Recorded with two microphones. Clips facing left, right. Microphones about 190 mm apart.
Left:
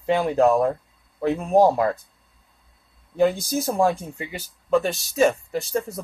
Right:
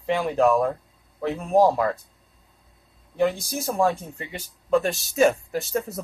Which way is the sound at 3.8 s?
5° left (ahead or behind).